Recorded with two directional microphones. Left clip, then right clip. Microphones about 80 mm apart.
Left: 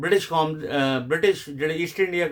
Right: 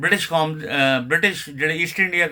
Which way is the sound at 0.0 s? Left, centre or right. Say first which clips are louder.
Right 2 dB; left.